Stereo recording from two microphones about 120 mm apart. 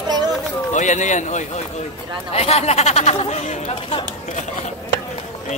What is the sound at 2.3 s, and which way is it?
Speech, 60° left (ahead or behind).